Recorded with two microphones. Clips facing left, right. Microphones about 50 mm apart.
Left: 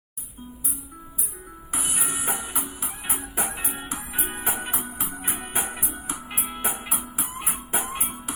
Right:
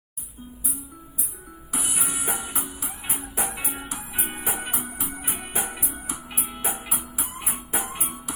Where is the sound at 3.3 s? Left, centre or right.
Left.